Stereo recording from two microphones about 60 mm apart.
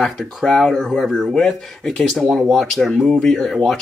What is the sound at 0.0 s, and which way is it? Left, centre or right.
Speech, centre.